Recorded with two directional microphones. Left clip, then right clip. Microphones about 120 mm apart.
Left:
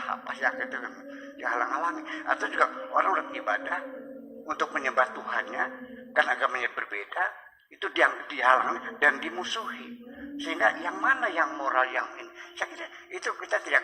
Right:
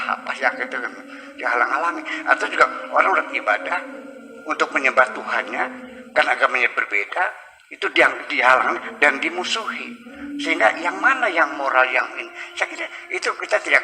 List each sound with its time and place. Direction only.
0.0 s a man's voice: 15° right (ahead or behind)